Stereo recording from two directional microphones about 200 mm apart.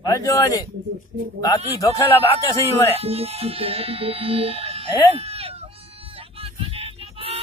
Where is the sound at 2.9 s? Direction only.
30° right (ahead or behind).